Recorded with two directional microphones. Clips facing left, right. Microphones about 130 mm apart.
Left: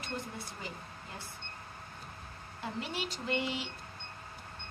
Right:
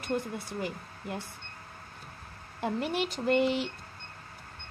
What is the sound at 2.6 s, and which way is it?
Speech, 55° right (ahead or behind).